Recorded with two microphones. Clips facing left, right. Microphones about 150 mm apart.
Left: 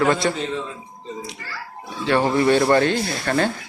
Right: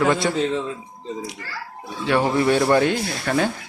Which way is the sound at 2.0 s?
10° right (ahead or behind).